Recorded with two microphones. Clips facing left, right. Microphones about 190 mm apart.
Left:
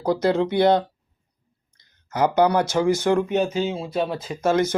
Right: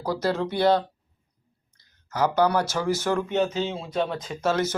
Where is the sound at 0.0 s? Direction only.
20° left (ahead or behind).